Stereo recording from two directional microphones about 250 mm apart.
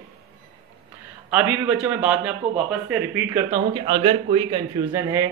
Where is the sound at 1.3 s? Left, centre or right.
Centre.